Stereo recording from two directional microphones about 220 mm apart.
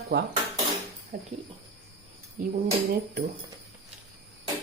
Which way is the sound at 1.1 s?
40° right (ahead or behind).